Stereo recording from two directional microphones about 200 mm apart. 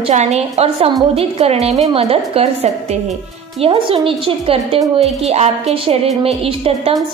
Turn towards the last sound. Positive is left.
turn(degrees=-30)  # may be behind; listen again after turning